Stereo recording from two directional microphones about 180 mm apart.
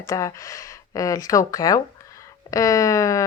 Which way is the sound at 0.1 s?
15° left (ahead or behind).